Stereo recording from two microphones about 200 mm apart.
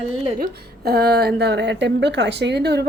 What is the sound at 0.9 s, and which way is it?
Speech, 50° right (ahead or behind).